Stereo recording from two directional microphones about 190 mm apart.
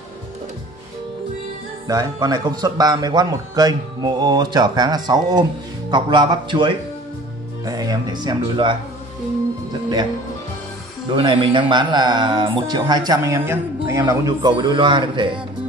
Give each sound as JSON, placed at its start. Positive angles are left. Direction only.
{"t": 1.9, "sound": "a man's voice", "side_deg": -20}
{"t": 9.7, "sound": "music", "side_deg": -20}
{"t": 11.1, "sound": "a man's voice", "side_deg": -25}